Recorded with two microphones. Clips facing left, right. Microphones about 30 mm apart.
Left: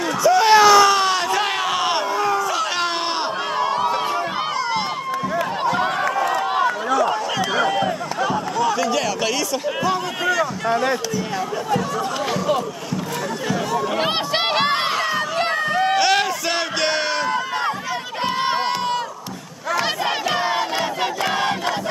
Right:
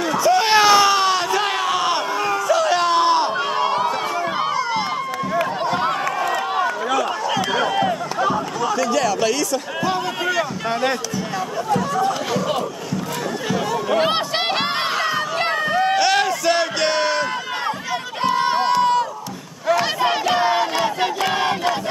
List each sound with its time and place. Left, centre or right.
0.0 s a sound: centre
3.5 s run: centre
7.0 s a sound: centre
8.5 s a sound: centre
9.8 s speech: centre
10.7 s speech: right
11.7 s speech: centre
13.5 s crowd: centre
19.7 s battle cry: centre